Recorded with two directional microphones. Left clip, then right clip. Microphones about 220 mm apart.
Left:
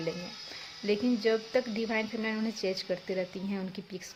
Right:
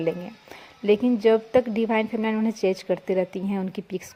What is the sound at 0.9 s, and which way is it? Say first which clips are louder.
A woman's voice: right 9 dB; 30° right (ahead or behind).